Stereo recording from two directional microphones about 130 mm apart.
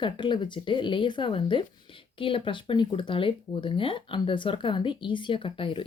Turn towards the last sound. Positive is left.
turn(degrees=40)  # may be behind; listen again after turning